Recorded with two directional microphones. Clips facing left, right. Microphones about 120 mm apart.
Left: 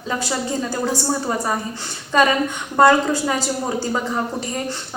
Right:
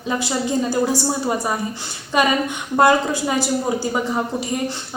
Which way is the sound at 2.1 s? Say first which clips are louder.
Left 1 dB; 15° right (ahead or behind).